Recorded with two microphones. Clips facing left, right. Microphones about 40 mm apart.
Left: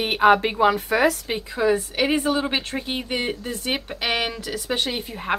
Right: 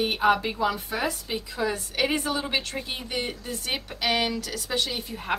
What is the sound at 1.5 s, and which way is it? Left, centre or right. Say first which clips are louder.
A woman's voice: left 9 dB; left.